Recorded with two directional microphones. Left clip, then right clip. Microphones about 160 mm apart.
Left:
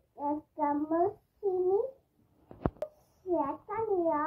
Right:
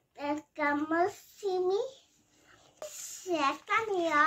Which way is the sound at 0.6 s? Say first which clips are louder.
Right 1 dB; 45° right (ahead or behind).